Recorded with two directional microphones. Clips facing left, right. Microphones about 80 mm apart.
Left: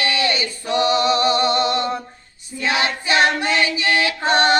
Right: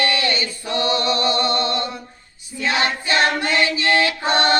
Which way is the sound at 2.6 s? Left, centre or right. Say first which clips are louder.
Even; centre.